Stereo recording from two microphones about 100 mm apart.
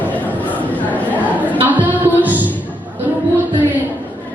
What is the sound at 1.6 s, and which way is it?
Music, 15° right (ahead or behind).